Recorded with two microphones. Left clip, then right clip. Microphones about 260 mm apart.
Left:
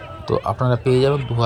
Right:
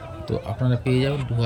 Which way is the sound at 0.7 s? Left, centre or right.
Centre.